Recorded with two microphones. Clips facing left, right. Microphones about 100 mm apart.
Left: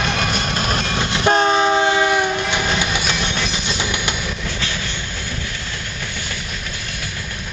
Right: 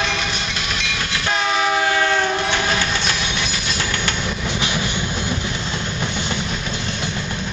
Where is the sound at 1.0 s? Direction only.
25° left (ahead or behind).